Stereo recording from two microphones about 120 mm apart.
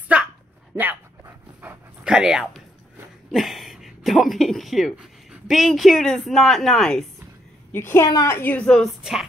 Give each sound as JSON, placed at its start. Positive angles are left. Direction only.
{"t": 0.1, "sound": "a sound", "side_deg": -10}
{"t": 0.7, "sound": "dog", "side_deg": -15}
{"t": 3.3, "sound": "speech", "side_deg": 0}
{"t": 7.7, "sound": "a woman's voice", "side_deg": 20}
{"t": 8.6, "sound": "a woman's voice", "side_deg": 0}